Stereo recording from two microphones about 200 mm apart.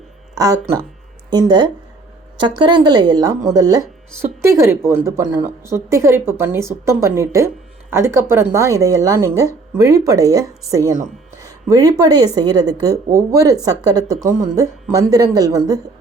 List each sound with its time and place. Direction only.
0.3 s speech: 20° right (ahead or behind)